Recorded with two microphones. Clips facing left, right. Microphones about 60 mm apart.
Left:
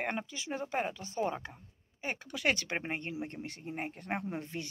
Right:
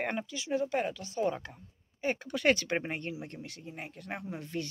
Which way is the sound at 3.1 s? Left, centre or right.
Left.